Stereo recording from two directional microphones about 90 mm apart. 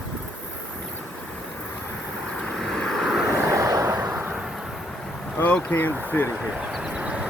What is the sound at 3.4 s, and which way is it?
Vehicle, 35° right (ahead or behind).